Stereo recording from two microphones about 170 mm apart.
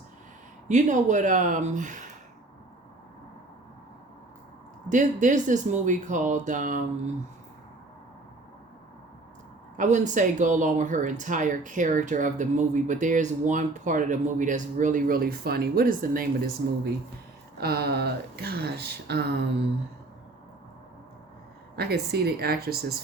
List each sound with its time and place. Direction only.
0.7 s speech: 45° right (ahead or behind)
4.9 s speech: 50° right (ahead or behind)
9.7 s speech: 45° right (ahead or behind)
17.6 s speech: 65° right (ahead or behind)
21.8 s speech: 70° right (ahead or behind)